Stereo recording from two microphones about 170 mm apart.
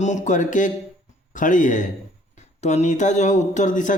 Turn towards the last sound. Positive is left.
turn(degrees=45)  # may be behind; listen again after turning